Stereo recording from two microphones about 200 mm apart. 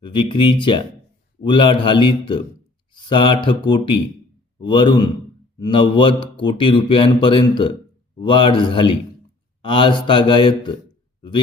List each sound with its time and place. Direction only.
0.0 s speech: 25° left (ahead or behind)